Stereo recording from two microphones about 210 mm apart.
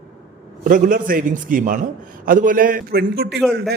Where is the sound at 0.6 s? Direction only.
40° right (ahead or behind).